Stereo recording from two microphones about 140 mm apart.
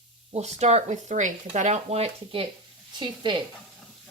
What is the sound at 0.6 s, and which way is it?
Speech, 55° right (ahead or behind).